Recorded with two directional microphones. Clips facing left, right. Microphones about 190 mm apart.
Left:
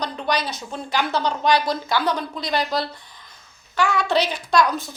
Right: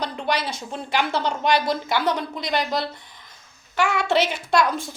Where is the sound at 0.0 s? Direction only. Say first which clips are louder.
Left 1 dB; 25° right (ahead or behind).